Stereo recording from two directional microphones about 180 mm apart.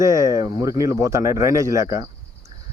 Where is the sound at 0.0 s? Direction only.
15° right (ahead or behind).